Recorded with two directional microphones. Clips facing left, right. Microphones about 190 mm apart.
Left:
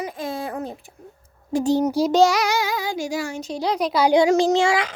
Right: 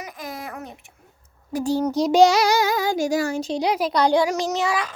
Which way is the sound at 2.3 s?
35° right (ahead or behind).